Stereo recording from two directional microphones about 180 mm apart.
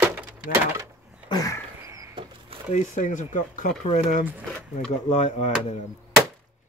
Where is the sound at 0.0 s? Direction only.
10° right (ahead or behind).